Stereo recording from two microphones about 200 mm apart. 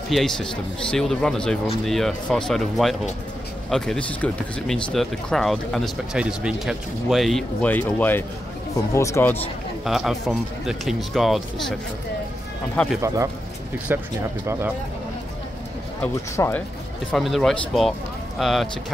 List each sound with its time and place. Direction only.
0.1 s speech: centre (ahead or behind)
9.8 s speech: centre (ahead or behind)
12.7 s speech: centre (ahead or behind)
13.0 s speech: 15° right (ahead or behind)
16.0 s speech: 10° left (ahead or behind)